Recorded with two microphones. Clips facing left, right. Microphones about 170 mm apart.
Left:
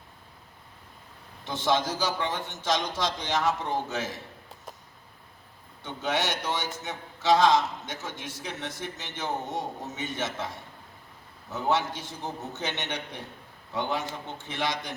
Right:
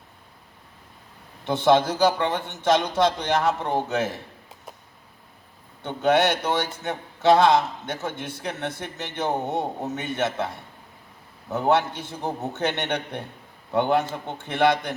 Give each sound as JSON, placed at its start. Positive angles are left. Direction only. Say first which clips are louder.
{"t": 1.5, "sound": "a man's voice", "louder": "right 8 dB", "side_deg": -60}
{"t": 5.8, "sound": "a man's voice", "louder": "right 9 dB", "side_deg": -60}
{"t": 11.5, "sound": "a man's voice", "louder": "right 6 dB", "side_deg": -60}